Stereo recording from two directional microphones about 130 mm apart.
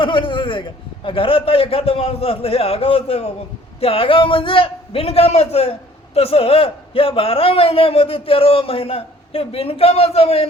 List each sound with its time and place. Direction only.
0.0 s a man's voice: 40° left (ahead or behind)